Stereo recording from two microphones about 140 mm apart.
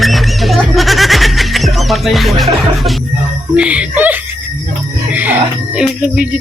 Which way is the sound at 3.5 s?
10° right (ahead or behind).